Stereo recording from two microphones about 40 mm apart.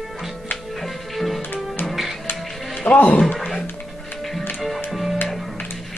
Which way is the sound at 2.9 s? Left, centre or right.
Left.